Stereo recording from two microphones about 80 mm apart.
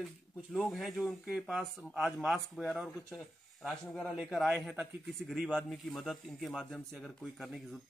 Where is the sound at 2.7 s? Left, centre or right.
Centre.